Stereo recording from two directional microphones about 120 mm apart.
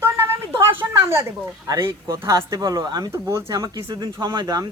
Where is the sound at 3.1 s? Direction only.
25° right (ahead or behind).